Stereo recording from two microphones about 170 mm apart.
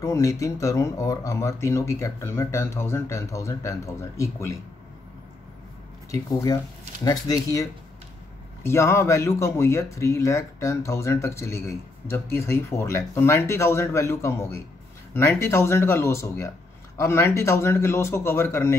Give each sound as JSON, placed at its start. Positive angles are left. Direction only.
{"t": 0.0, "sound": "speech", "side_deg": 20}
{"t": 6.1, "sound": "speech", "side_deg": 20}
{"t": 8.6, "sound": "speech", "side_deg": 15}